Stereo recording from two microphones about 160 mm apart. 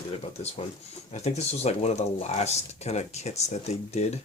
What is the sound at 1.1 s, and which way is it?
Speech, 45° left (ahead or behind).